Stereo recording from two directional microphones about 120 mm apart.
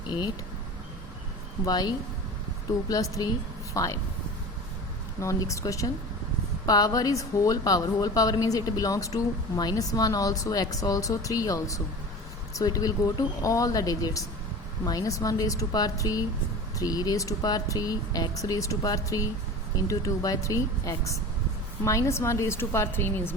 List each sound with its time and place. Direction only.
1.6 s a woman's voice: 35° left (ahead or behind)
5.2 s a woman's voice: 25° left (ahead or behind)